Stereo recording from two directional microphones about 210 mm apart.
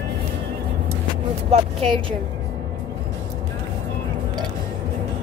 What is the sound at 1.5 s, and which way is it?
Speech, 25° right (ahead or behind).